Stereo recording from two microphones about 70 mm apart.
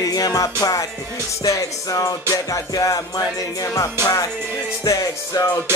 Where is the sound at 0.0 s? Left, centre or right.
Left.